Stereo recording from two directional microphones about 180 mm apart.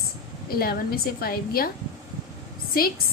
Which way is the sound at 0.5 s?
55° left (ahead or behind).